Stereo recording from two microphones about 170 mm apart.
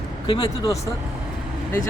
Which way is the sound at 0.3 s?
20° left (ahead or behind).